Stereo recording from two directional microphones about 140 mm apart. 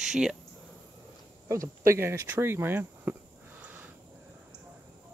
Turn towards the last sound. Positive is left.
turn(degrees=-10)  # may be behind; listen again after turning